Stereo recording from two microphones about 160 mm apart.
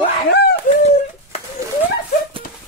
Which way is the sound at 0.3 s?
90° left.